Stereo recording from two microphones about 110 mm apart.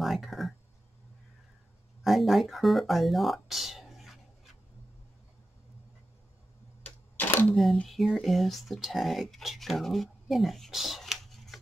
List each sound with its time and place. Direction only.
0.0 s speech: centre (ahead or behind)
2.0 s speech: centre (ahead or behind)
6.8 s camera: 15° left (ahead or behind)
7.5 s speech: 5° left (ahead or behind)